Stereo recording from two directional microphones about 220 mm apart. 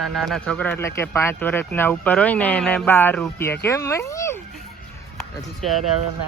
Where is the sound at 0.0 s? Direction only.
Centre (ahead or behind).